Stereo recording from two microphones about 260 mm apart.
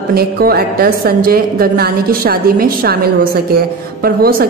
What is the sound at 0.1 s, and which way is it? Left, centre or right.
A woman's voice, right.